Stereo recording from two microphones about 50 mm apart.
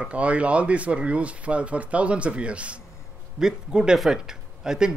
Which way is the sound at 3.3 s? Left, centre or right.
Centre.